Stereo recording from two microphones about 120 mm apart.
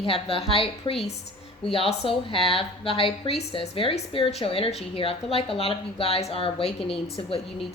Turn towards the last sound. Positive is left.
turn(degrees=55)  # may be behind; listen again after turning